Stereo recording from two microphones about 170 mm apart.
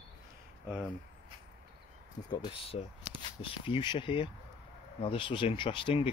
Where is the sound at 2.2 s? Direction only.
25° left (ahead or behind).